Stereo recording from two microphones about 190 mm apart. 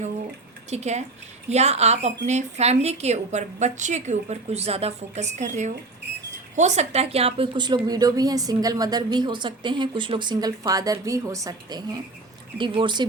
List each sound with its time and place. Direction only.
0.7 s a woman's voice: 35° right (ahead or behind)